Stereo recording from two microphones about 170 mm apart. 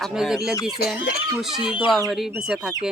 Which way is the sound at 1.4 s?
5° right (ahead or behind).